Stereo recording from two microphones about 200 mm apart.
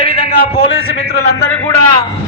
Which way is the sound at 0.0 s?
30° left (ahead or behind).